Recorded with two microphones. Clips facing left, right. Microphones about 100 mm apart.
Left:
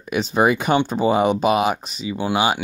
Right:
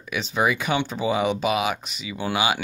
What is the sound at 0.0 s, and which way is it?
Speech, 45° left (ahead or behind).